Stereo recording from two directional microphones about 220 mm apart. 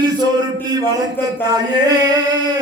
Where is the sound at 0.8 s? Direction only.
15° right (ahead or behind).